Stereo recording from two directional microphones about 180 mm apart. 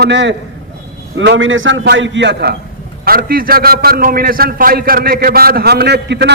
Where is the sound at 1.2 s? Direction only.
90° right; by 2.6 s 70° right (ahead or behind).